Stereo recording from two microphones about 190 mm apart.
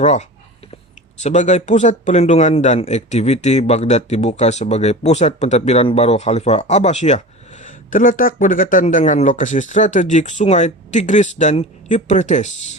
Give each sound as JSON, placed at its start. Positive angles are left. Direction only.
{"t": 0.0, "sound": "speech", "side_deg": 40}